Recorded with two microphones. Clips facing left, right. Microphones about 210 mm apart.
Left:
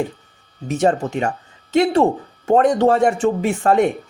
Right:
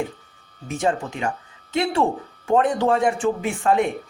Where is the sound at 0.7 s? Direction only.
40° left (ahead or behind).